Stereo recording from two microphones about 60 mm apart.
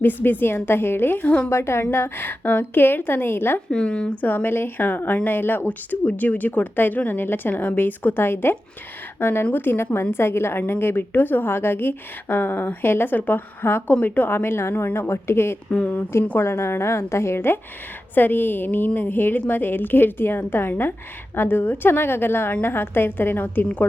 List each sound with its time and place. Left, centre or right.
0.0 s a woman's voice: left
1.5 s a woman's voice: left
3.7 s speech: centre
4.2 s a woman's voice: left
15.7 s speech: left
16.4 s a woman's voice: left
23.6 s speech: left